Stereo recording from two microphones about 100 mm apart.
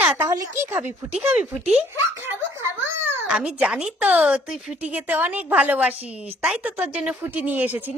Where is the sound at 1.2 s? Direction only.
15° right (ahead or behind).